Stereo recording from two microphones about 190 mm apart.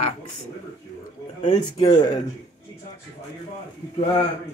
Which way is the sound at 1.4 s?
20° left (ahead or behind).